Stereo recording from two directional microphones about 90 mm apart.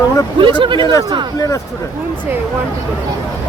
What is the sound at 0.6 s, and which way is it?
Speech, 65° right (ahead or behind).